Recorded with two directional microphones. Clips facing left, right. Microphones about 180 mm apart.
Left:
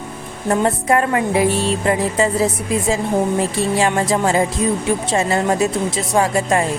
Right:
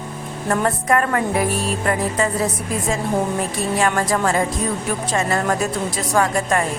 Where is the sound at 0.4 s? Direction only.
25° left (ahead or behind).